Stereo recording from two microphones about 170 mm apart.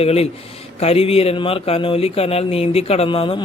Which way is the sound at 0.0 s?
35° left (ahead or behind).